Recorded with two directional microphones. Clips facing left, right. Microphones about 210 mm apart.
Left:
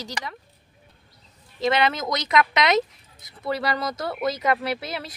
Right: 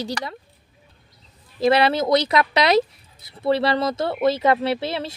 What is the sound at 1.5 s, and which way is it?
Speech, 35° right (ahead or behind).